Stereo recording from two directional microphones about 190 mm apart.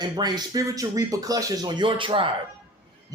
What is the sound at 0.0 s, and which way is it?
A man's voice, 20° right (ahead or behind).